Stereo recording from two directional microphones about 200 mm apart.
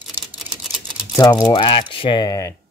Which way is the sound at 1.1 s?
20° left (ahead or behind).